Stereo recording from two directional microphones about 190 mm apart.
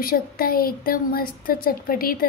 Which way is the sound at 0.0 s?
50° left (ahead or behind).